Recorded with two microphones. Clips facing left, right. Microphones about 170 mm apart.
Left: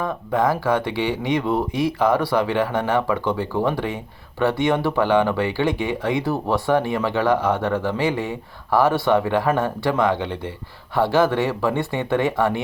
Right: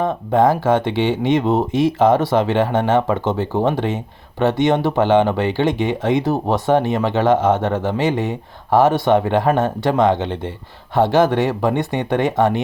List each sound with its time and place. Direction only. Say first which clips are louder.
0.0 s speech: right 6 dB; 25° right (ahead or behind)